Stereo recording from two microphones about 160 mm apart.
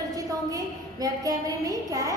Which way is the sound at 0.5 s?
20° right (ahead or behind).